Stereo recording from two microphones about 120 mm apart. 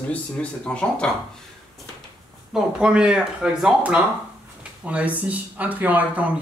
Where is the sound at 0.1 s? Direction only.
10° left (ahead or behind).